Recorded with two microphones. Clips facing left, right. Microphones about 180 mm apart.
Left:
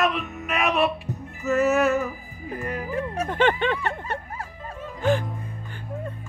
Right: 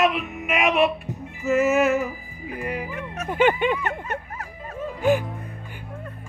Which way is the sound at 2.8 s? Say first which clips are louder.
Left 5 dB; 30° left (ahead or behind).